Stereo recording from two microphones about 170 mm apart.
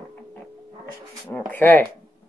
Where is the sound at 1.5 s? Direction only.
10° left (ahead or behind).